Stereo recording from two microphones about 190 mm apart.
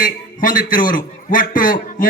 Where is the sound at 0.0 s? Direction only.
45° left (ahead or behind).